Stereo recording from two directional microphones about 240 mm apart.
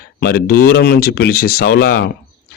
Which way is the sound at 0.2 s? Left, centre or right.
Left.